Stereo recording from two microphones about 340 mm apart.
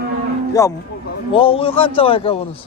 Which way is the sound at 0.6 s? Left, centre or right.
Centre.